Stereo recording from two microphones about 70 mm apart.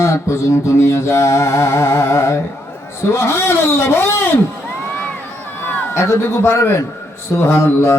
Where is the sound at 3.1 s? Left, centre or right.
Left.